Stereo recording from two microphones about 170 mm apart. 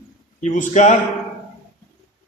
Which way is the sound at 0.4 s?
45° left (ahead or behind).